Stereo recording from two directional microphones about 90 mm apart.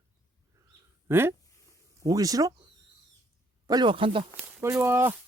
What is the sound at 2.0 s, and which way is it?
Speech, 40° right (ahead or behind).